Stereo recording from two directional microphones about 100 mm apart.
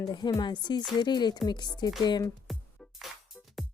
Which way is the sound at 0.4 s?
45° left (ahead or behind).